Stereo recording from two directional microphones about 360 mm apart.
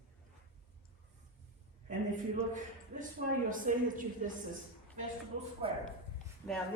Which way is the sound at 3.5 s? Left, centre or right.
Right.